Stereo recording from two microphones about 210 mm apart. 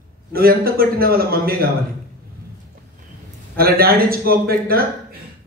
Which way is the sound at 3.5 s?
45° right (ahead or behind).